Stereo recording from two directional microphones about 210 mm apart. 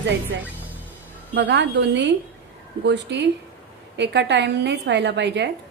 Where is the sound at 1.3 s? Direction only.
55° right (ahead or behind).